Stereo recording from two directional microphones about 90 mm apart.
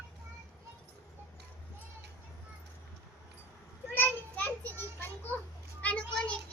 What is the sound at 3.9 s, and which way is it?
Children playing, 20° left (ahead or behind).